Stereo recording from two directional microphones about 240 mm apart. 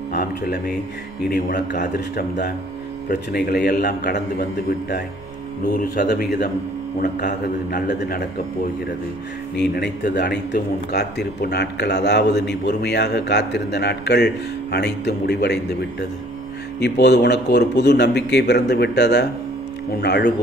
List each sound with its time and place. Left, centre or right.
0.1 s a man's voice: left
9.6 s speech: left